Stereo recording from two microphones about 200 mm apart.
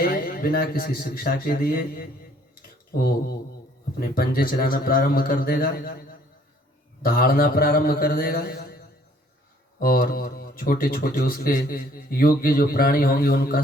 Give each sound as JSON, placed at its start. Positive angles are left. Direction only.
{"t": 0.0, "sound": "speech", "side_deg": 45}
{"t": 2.6, "sound": "a sound", "side_deg": 50}
{"t": 4.0, "sound": "speech", "side_deg": 45}
{"t": 9.8, "sound": "speech", "side_deg": 45}